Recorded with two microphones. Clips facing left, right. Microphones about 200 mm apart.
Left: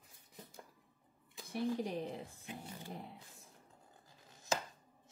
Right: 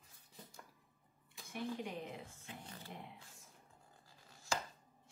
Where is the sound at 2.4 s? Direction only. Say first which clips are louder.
Left 4 dB; 15° left (ahead or behind).